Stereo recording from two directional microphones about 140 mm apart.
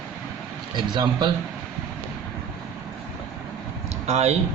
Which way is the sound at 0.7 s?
35° right (ahead or behind).